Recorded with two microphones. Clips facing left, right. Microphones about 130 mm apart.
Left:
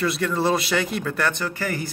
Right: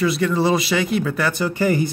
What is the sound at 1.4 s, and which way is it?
Speech, 20° right (ahead or behind).